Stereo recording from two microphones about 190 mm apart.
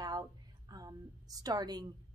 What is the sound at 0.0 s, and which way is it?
A woman's voice, 20° right (ahead or behind).